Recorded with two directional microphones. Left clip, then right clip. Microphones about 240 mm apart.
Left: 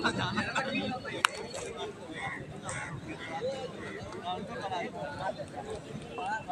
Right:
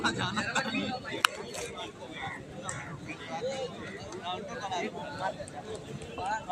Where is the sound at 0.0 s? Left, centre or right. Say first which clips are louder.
Even; right.